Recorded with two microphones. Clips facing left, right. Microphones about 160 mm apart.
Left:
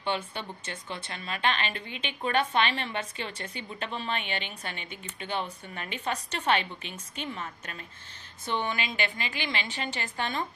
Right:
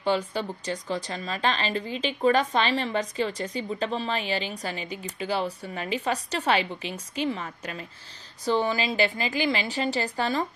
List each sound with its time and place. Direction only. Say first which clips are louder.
0.0 s speech: right 6 dB; 35° right (ahead or behind)